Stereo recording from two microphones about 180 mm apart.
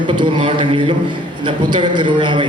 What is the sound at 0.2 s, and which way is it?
Speech, 30° right (ahead or behind).